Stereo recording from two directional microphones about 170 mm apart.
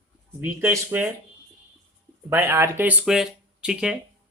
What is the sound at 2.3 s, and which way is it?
A man's voice, 15° right (ahead or behind).